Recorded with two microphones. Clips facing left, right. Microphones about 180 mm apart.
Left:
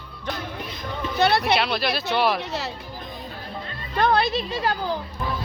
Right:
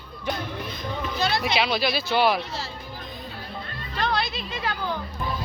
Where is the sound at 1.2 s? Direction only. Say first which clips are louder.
Left 6 dB; 65° left (ahead or behind).